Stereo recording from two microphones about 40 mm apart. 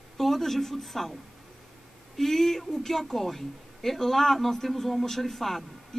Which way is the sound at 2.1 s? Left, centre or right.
Centre.